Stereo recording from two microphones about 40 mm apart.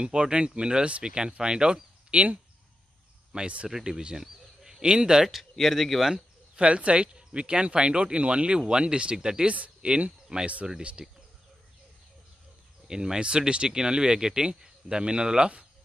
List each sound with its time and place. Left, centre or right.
0.0 s speech: right
3.3 s speech: right
3.6 s speech: centre
5.3 s speech: centre
6.1 s speech: right
9.8 s speech: right
12.8 s speech: centre